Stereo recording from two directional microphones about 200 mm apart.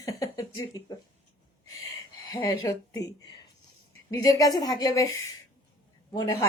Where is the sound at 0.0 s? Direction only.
15° left (ahead or behind).